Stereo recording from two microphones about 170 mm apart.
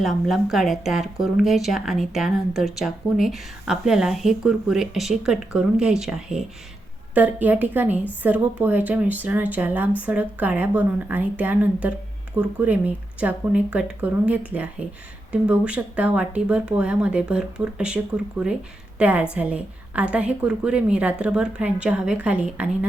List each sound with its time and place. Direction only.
0.0 s a woman's voice: centre (ahead or behind)